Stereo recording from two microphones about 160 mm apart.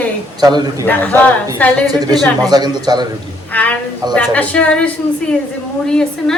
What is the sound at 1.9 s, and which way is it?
A man's voice, 25° right (ahead or behind).